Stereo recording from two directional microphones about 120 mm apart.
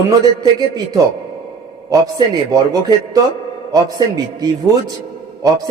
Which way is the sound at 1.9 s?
30° right (ahead or behind).